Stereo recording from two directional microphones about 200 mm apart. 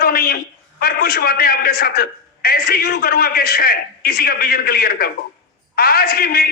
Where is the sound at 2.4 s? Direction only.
50° left (ahead or behind).